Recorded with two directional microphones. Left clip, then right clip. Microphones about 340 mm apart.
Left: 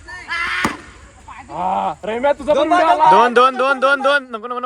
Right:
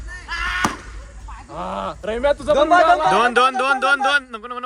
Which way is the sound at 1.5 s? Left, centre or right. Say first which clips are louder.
Left 7 dB; centre.